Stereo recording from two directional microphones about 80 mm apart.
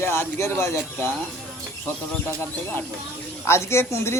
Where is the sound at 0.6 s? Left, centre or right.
Left.